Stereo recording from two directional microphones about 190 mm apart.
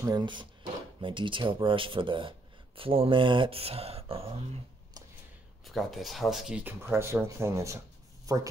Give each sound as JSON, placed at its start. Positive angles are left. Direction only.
{"t": 0.0, "sound": "speech", "side_deg": -20}
{"t": 5.7, "sound": "speech", "side_deg": 0}